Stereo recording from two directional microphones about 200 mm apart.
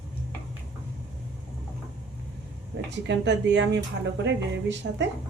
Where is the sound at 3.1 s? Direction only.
65° right (ahead or behind).